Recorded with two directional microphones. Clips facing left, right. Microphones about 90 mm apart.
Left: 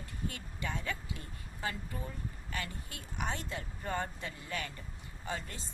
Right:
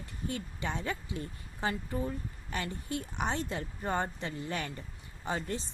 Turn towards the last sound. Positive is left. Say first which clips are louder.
# right 6 dB
turn(degrees=-25)  # may be behind; listen again after turning